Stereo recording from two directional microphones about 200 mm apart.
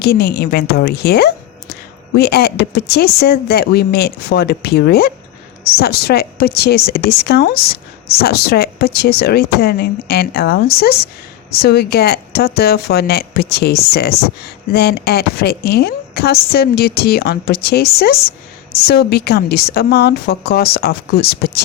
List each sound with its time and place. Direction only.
0.0 s speech: 55° left (ahead or behind)